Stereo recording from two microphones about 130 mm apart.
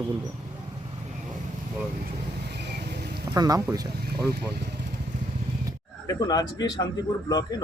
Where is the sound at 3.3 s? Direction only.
30° right (ahead or behind).